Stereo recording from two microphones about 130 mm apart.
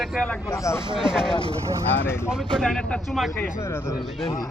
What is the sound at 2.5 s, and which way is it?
Speech, 5° left (ahead or behind).